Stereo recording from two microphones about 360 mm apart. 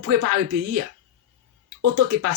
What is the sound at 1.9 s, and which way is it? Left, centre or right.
Speech, right.